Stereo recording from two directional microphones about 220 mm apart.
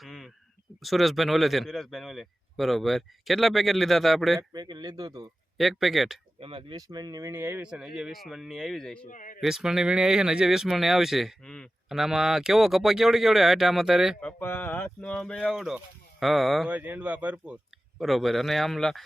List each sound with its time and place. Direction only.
0.0 s a sound: centre (ahead or behind)
0.8 s speech: centre (ahead or behind)
4.4 s speech: 20° right (ahead or behind)
5.5 s speech: centre (ahead or behind)
6.4 s speech: 25° right (ahead or behind); by 9.0 s 5° left (ahead or behind)
9.0 s a man's voice: 35° left (ahead or behind)
9.4 s speech: centre (ahead or behind)